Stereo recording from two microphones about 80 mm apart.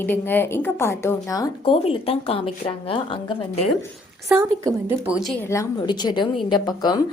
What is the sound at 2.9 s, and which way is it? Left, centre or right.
Speech, left.